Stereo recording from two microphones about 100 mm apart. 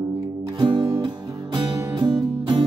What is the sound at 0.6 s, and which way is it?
Music, 45° right (ahead or behind).